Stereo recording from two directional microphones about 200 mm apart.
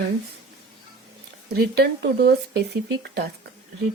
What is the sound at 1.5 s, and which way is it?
Speech, 55° right (ahead or behind).